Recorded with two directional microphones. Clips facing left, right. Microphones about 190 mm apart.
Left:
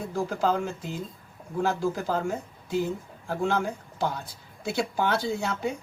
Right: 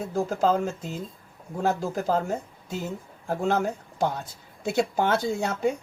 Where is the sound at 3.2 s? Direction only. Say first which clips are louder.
Right 2 dB; 45° right (ahead or behind).